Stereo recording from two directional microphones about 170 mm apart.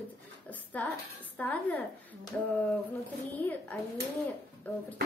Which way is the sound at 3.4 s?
10° left (ahead or behind).